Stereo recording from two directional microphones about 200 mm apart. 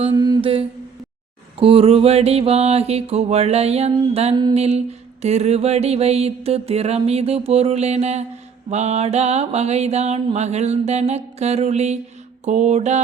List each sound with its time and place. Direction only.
0.0 s humming: 20° right (ahead or behind)
1.5 s mantra: 30° right (ahead or behind)